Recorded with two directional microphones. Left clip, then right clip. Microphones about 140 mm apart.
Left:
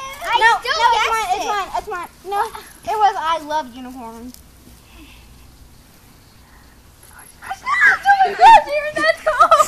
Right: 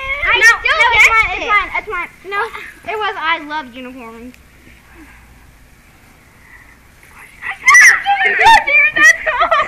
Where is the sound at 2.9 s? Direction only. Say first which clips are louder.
Left 1 dB; 60° left (ahead or behind).